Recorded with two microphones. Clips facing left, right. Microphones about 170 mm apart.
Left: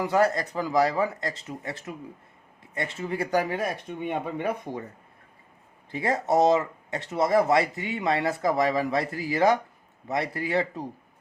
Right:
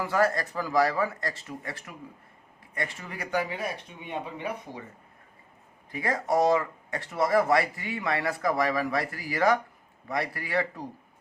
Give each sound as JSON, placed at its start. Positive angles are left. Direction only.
{"t": 0.0, "sound": "speech", "side_deg": 20}
{"t": 3.3, "sound": "speech", "side_deg": 45}
{"t": 5.9, "sound": "speech", "side_deg": 25}